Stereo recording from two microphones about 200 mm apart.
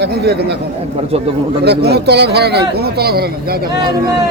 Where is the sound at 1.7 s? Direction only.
55° right (ahead or behind).